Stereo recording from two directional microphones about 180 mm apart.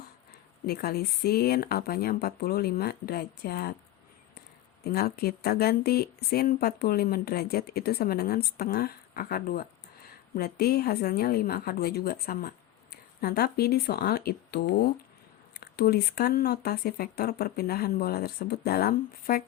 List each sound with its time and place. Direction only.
0.6 s speech: 55° left (ahead or behind)